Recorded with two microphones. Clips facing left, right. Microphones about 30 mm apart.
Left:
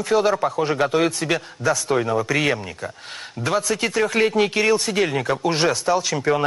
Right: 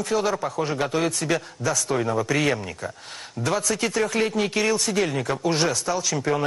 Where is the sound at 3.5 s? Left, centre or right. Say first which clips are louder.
Left 2 dB; centre.